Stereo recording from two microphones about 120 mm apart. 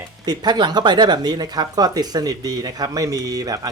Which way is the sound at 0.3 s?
35° right (ahead or behind).